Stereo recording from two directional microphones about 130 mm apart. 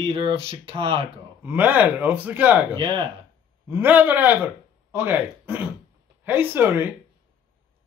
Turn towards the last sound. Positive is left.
turn(degrees=-15)  # may be behind; listen again after turning